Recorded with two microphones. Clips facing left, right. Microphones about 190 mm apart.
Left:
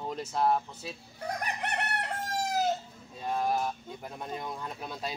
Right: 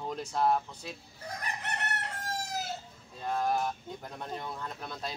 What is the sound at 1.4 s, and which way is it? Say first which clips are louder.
Chicken: left 1 dB; 65° left (ahead or behind).